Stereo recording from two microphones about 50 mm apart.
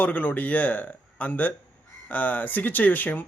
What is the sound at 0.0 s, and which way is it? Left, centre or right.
Speech, left.